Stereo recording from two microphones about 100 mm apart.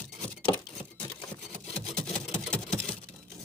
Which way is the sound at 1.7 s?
10° left (ahead or behind).